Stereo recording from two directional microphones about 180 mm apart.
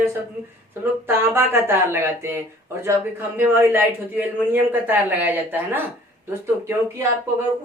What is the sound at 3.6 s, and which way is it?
A woman's voice, 10° right (ahead or behind).